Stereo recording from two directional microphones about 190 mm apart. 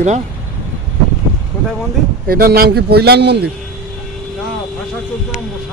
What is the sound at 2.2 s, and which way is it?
A man's voice, 55° right (ahead or behind).